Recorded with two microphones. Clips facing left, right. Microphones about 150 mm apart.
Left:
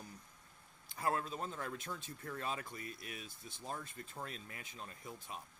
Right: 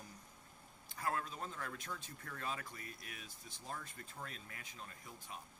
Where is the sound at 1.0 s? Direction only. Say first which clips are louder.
Left 3 dB; 25° left (ahead or behind).